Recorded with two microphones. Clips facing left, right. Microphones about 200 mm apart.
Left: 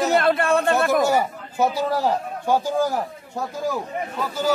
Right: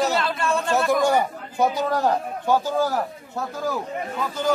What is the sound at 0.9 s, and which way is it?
A man's voice, 5° left (ahead or behind).